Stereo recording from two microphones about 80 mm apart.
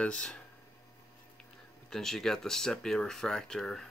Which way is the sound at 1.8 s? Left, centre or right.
Centre.